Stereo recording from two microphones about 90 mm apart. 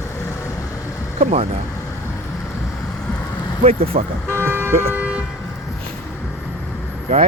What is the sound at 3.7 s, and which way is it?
Speech, 90° right.